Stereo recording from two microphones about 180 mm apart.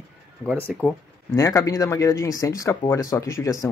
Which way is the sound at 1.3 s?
15° left (ahead or behind).